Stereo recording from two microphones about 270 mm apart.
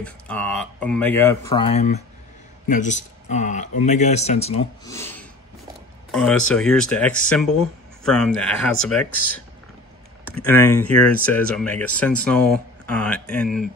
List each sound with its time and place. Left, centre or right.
0.0 s speech: centre; by 4.6 s left
4.8 s speech: centre
6.5 s speech: centre
10.3 s speech: centre